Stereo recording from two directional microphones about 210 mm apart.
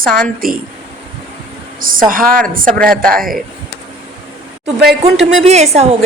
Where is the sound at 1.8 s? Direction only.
40° right (ahead or behind).